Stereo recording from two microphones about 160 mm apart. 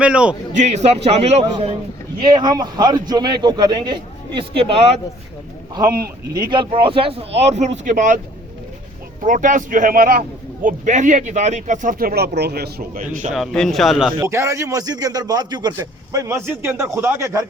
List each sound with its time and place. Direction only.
0.0 s a man's voice: 5° right (ahead or behind)
0.5 s speech: 45° right (ahead or behind)
2.2 s a man's voice: 25° right (ahead or behind)
6.3 s speech: 30° right (ahead or behind); by 8.2 s 55° right (ahead or behind)
9.2 s a man's voice: 55° right (ahead or behind)
13.3 s a man's voice: centre (ahead or behind)
14.2 s a man's voice: 20° right (ahead or behind)